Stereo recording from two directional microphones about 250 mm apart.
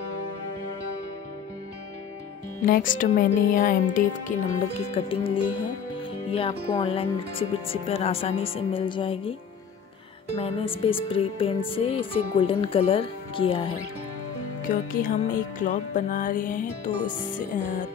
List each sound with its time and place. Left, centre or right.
2.6 s music: left
4.7 s speech: left
10.3 s speech: left
14.7 s music: left